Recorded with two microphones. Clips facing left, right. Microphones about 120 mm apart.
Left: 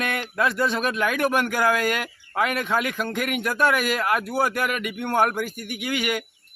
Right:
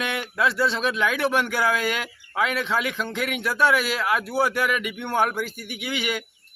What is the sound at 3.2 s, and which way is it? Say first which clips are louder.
A man's voice: even; 50° left (ahead or behind).